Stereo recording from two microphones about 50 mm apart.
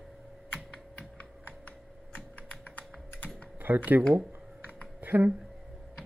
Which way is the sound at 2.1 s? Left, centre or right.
Left.